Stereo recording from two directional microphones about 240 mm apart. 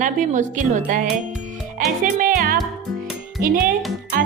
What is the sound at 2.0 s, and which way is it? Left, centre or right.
Speech, right.